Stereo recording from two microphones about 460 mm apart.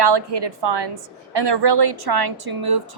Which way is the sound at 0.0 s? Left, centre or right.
Right.